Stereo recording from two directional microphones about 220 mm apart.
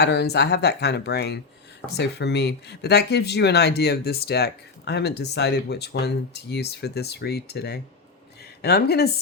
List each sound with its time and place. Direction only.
0.0 s speech: 50° left (ahead or behind)